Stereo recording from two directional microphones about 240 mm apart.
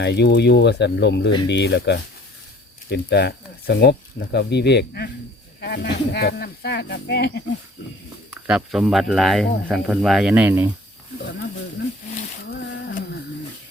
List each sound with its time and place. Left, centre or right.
0.0 s speech: left
8.4 s speech: centre
12.5 s a sound: left